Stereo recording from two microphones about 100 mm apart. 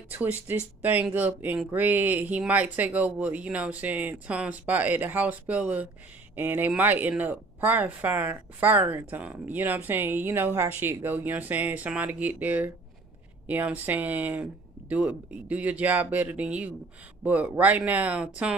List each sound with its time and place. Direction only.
0.1 s a woman's voice: 20° right (ahead or behind)